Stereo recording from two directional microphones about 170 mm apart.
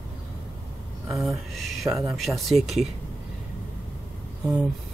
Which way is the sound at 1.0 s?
Centre (ahead or behind).